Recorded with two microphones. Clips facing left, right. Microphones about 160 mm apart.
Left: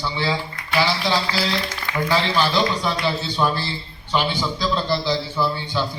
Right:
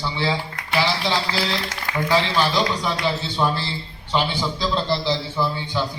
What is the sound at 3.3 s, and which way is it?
A man's voice, 25° right (ahead or behind).